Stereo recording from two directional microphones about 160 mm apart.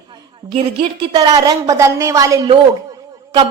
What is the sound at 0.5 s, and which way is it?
A woman's voice, 35° right (ahead or behind).